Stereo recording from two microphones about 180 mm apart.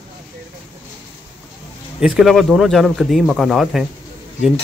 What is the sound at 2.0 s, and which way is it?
Speech, centre (ahead or behind).